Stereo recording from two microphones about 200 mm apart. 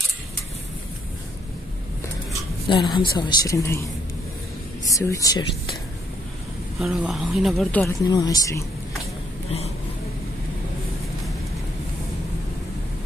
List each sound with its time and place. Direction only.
2.7 s speech: 20° left (ahead or behind)
4.8 s speech: 15° left (ahead or behind)
6.8 s speech: centre (ahead or behind)
8.1 s speech: 20° left (ahead or behind)